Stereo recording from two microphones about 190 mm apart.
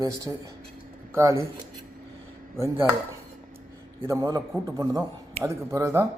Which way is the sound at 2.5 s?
15° right (ahead or behind).